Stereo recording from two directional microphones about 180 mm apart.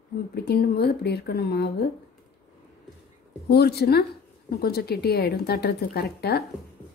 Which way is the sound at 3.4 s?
65° left (ahead or behind).